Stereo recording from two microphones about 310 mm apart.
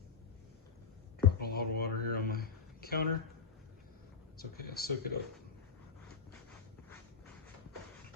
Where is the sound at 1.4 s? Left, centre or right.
Left.